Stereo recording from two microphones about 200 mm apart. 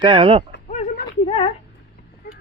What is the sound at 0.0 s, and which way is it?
Speech, 25° right (ahead or behind).